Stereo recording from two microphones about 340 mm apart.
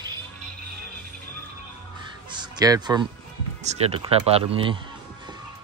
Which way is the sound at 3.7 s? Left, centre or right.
Centre.